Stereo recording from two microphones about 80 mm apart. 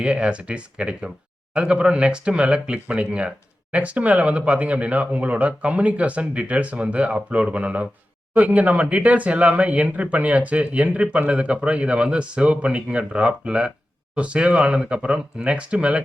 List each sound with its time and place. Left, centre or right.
0.0 s speech: centre